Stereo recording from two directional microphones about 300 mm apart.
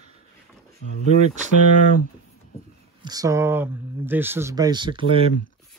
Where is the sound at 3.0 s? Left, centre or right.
Centre.